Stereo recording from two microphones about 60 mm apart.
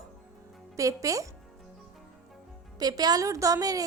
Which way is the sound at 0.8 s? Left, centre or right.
Right.